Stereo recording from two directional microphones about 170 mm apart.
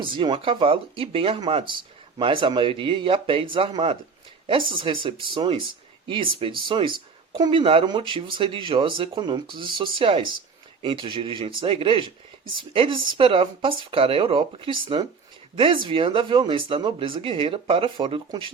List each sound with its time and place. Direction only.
0.0 s speech: 30° right (ahead or behind)